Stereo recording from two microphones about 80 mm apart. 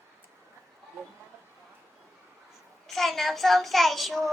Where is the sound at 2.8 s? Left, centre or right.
Centre.